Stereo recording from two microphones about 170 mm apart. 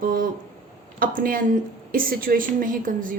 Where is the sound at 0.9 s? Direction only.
55° right (ahead or behind).